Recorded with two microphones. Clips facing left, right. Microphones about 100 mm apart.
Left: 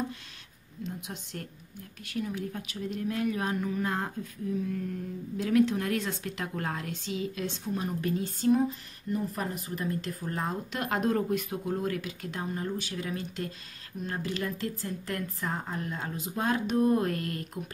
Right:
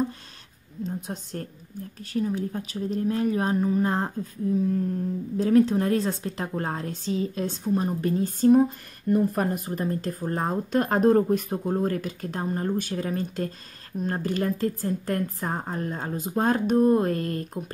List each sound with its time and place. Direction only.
0.8 s speech: 40° right (ahead or behind)